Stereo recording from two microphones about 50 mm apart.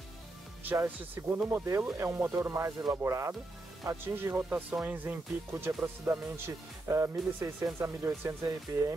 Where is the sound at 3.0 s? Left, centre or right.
Right.